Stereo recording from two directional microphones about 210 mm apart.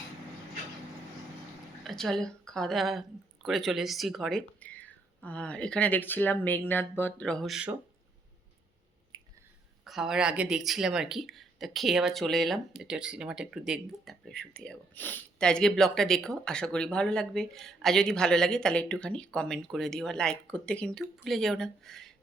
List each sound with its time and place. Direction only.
1.8 s speech: centre (ahead or behind)
9.1 s a sound: 20° right (ahead or behind)
9.8 s speech: centre (ahead or behind)